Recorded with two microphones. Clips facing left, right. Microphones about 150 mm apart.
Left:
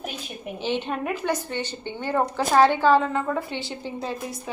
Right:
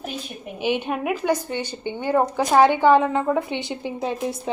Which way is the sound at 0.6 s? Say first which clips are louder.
Right 4 dB; 15° right (ahead or behind).